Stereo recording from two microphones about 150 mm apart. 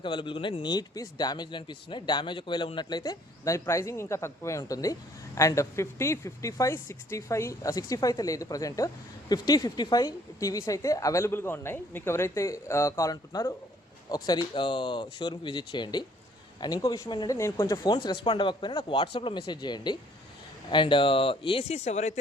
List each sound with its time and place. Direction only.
0.0 s speech: 35° left (ahead or behind)
17.9 s speech: 30° left (ahead or behind); by 22.2 s 50° left (ahead or behind)